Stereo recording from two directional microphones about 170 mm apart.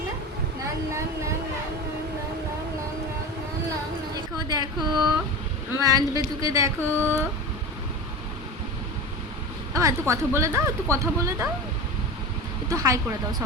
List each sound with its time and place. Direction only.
4.1 s a sound: 20° right (ahead or behind)
5.7 s speech: 20° right (ahead or behind)
9.7 s a woman's voice: 20° right (ahead or behind)
12.6 s speech: 20° right (ahead or behind)